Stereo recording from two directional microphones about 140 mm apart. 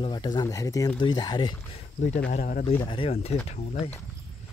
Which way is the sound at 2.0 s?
55° left (ahead or behind).